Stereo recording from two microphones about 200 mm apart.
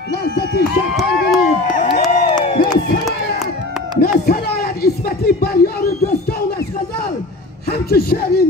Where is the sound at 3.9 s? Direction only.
50° left (ahead or behind).